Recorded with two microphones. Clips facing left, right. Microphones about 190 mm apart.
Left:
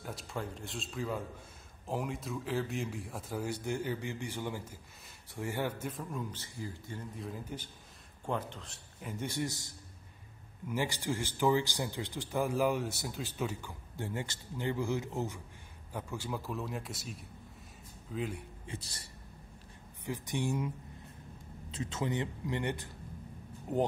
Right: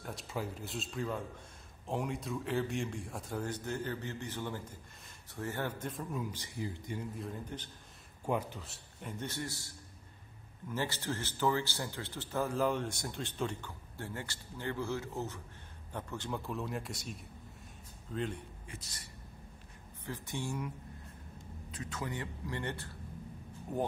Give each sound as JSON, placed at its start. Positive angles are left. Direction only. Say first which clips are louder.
{"t": 0.0, "sound": "speech", "louder": "even", "side_deg": 0}
{"t": 6.3, "sound": "a man's voice", "louder": "right 3 dB", "side_deg": -15}
{"t": 7.2, "sound": "speech", "louder": "even", "side_deg": 5}
{"t": 8.3, "sound": "a man's voice", "louder": "right 2 dB", "side_deg": -10}
{"t": 9.2, "sound": "speech", "louder": "left 5 dB", "side_deg": 15}
{"t": 10.7, "sound": "speech", "louder": "left 2 dB", "side_deg": 10}
{"t": 18.7, "sound": "a sound", "louder": "left 9 dB", "side_deg": 30}
{"t": 20.1, "sound": "speech", "louder": "left 5 dB", "side_deg": 15}